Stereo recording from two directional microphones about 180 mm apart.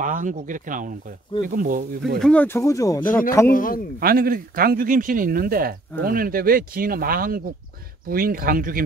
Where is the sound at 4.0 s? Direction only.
55° right (ahead or behind).